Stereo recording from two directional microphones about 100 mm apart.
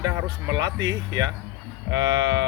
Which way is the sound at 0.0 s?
30° right (ahead or behind).